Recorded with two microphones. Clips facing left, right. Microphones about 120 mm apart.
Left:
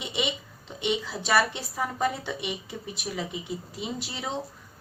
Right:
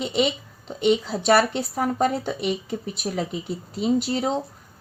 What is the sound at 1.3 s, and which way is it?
Speech, 50° right (ahead or behind).